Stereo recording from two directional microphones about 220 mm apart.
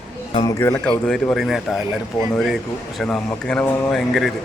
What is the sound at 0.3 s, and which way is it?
Speech, 15° left (ahead or behind).